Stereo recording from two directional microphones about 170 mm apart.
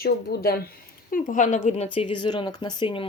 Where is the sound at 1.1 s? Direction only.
55° left (ahead or behind).